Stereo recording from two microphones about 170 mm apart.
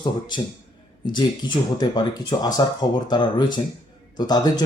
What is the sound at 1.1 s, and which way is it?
Speech, 25° left (ahead or behind).